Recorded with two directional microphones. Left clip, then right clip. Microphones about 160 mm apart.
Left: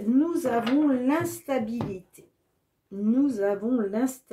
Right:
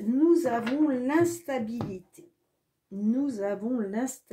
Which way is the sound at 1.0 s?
45° right (ahead or behind).